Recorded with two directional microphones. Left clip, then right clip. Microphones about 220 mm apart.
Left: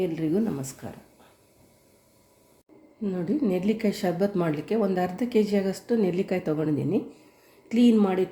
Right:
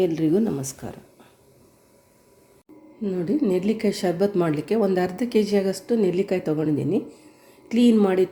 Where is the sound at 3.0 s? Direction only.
10° right (ahead or behind).